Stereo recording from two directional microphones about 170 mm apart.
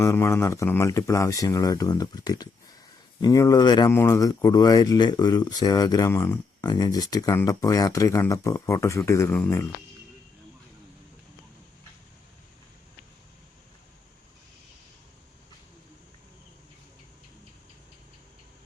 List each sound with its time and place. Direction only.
0.0 s speech: 15° left (ahead or behind)